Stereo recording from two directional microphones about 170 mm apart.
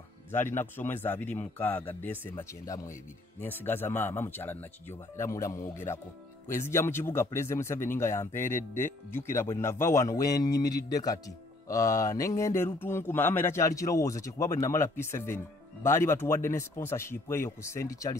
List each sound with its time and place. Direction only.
0.3 s speech: 15° left (ahead or behind)